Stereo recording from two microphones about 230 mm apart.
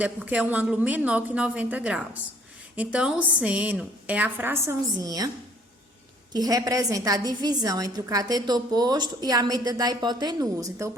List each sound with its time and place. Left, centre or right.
0.0 s a woman's voice: centre
6.3 s a woman's voice: centre